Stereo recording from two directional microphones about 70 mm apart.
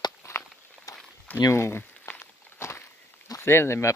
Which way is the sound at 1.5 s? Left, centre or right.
Left.